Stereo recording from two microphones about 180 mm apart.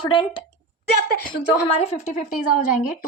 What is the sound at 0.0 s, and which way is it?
Speech, 30° left (ahead or behind).